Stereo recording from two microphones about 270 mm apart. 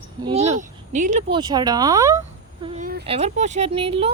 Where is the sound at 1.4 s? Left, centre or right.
Centre.